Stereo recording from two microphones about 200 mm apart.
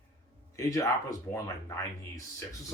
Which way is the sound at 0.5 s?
15° left (ahead or behind).